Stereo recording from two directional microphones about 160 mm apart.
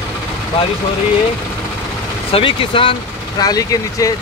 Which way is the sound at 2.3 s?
35° left (ahead or behind).